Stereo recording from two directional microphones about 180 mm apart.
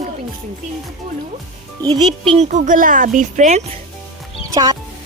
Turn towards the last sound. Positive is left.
turn(degrees=-20)  # may be behind; listen again after turning